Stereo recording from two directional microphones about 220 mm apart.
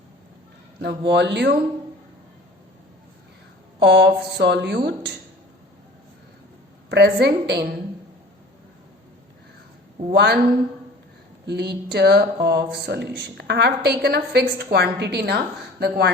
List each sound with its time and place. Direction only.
0.8 s a woman's voice: 50° right (ahead or behind)
3.8 s a woman's voice: 50° right (ahead or behind)
6.9 s a woman's voice: 50° right (ahead or behind)
10.1 s a woman's voice: 45° right (ahead or behind)
11.4 s a woman's voice: 50° right (ahead or behind)